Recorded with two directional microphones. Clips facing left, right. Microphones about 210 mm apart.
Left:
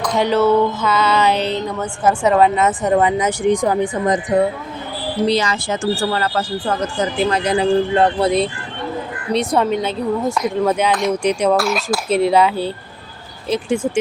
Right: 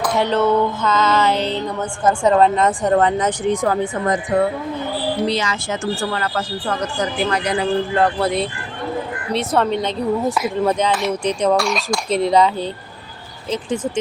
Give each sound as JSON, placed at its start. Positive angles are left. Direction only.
{"t": 0.2, "sound": "speech", "side_deg": 10}
{"t": 5.3, "sound": "speech", "side_deg": 35}
{"t": 10.3, "sound": "speech", "side_deg": -5}
{"t": 11.2, "sound": "speech", "side_deg": 10}